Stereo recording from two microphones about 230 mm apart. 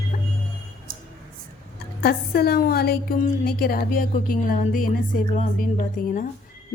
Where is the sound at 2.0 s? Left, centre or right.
Left.